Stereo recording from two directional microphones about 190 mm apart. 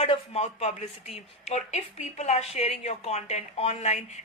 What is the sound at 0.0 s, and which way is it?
Speech, 35° left (ahead or behind).